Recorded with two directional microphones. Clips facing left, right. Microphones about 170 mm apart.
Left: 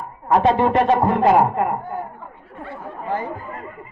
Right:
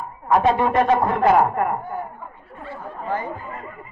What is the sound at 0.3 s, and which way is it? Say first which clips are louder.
A man's voice: left 2 dB; 25° left (ahead or behind).